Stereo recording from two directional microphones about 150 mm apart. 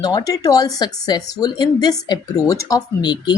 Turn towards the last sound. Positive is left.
turn(degrees=30)  # may be behind; listen again after turning